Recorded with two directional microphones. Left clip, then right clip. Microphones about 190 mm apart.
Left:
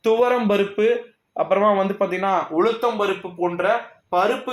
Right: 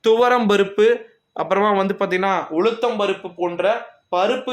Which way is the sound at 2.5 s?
10° right (ahead or behind).